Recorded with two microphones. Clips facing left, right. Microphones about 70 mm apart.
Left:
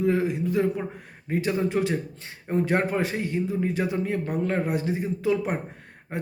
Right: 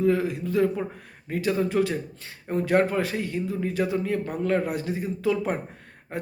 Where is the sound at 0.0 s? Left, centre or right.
Left.